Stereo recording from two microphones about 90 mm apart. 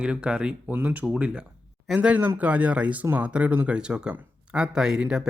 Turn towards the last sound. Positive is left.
turn(degrees=-5)  # may be behind; listen again after turning